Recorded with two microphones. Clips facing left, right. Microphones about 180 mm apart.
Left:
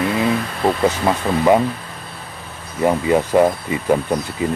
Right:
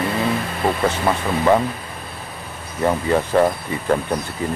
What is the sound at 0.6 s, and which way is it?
Speech, 10° left (ahead or behind).